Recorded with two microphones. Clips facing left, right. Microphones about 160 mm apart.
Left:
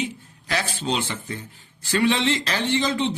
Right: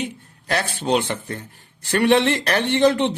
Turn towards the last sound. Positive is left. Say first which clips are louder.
# right 5 dB
turn(degrees=-65)  # may be behind; listen again after turning